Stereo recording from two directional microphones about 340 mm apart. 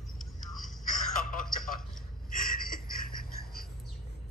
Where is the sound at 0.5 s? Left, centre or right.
Centre.